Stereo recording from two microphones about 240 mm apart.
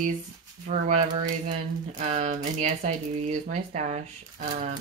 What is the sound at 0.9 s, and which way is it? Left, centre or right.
Speech, right.